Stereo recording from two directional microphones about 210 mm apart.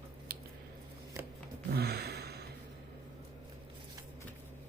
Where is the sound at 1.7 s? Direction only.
50° right (ahead or behind).